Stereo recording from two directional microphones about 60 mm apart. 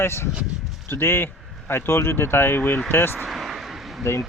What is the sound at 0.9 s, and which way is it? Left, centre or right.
Speech, left.